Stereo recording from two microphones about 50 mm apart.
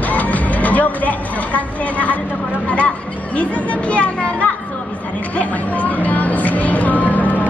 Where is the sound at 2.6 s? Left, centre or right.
Left.